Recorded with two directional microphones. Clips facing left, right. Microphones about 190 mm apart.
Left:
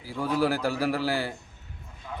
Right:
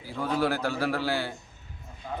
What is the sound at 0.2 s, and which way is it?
A man's voice, 10° left (ahead or behind).